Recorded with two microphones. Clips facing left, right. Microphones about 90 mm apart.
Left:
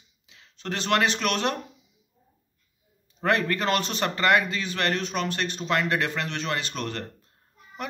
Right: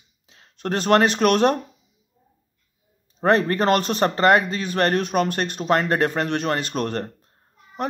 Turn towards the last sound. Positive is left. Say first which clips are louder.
# right 6 dB
turn(degrees=-45)  # may be behind; listen again after turning